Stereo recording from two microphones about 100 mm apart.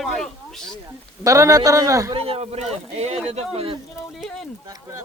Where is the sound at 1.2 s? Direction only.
35° right (ahead or behind).